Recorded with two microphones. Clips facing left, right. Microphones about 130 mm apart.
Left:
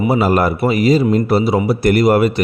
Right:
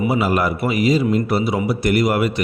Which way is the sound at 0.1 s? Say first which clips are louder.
Left 4 dB; 35° left (ahead or behind).